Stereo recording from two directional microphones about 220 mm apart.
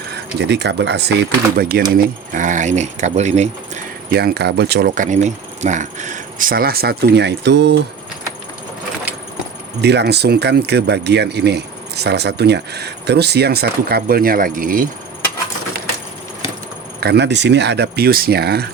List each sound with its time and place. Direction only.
0.3 s speech: 50° right (ahead or behind); by 3.5 s 30° right (ahead or behind)
4.1 s speech: 45° right (ahead or behind)
9.8 s speech: 50° right (ahead or behind)
17.0 s speech: 50° right (ahead or behind)